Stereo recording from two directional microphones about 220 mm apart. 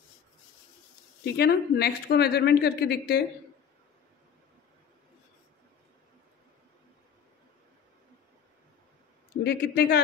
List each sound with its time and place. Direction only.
1.2 s a woman's voice: 45° left (ahead or behind)
9.4 s a woman's voice: 45° left (ahead or behind)